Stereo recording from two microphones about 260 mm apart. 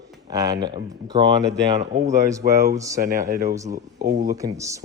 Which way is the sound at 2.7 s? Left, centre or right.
Centre.